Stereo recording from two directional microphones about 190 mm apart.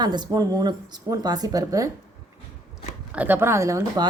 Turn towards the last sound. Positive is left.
turn(degrees=-15)  # may be behind; listen again after turning